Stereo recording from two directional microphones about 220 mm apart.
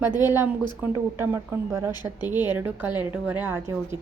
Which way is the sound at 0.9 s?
10° right (ahead or behind).